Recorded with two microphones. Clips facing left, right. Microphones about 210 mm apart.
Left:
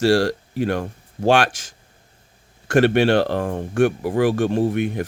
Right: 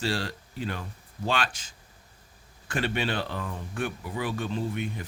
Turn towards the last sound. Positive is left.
turn(degrees=70)  # may be behind; listen again after turning